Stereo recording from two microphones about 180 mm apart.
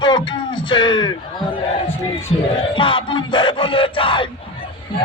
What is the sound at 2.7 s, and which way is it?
Music, 30° left (ahead or behind).